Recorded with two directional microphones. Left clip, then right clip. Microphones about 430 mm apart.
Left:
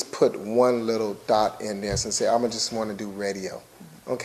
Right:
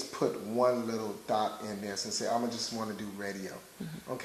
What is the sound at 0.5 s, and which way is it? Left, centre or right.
Speech, centre.